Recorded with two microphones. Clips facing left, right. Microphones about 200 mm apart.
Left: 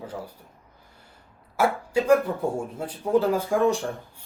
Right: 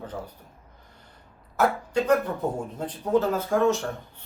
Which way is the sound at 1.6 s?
10° left (ahead or behind).